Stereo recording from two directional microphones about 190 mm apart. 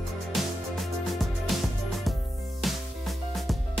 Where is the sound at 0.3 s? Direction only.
Centre (ahead or behind).